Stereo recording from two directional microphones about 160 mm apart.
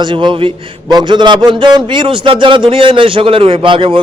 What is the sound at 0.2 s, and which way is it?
A man's voice, 30° right (ahead or behind).